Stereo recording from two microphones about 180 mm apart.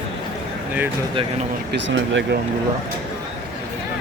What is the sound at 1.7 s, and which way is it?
Speech, 70° right (ahead or behind).